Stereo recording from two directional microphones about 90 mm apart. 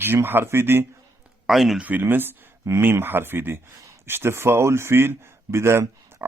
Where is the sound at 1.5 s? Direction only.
Centre (ahead or behind).